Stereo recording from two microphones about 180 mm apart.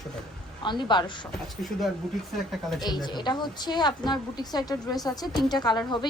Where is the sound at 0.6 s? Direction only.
25° left (ahead or behind).